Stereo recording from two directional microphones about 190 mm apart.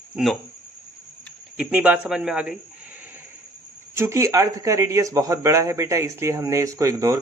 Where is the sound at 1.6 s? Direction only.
5° right (ahead or behind).